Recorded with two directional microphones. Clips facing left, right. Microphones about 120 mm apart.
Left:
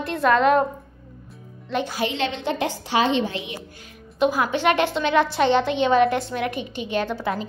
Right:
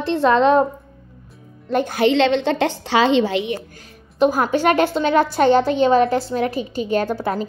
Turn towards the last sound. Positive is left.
turn(degrees=-40)  # may be behind; listen again after turning